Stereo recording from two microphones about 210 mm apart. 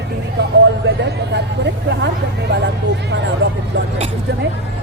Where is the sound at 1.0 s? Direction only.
55° right (ahead or behind).